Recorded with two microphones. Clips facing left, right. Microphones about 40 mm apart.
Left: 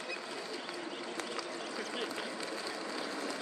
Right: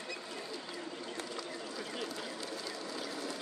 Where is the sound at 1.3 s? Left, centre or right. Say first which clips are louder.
Left 2 dB; left.